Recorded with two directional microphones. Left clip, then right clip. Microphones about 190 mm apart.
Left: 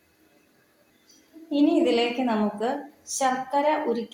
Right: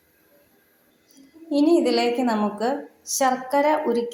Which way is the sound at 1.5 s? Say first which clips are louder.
Right 2 dB; 35° right (ahead or behind).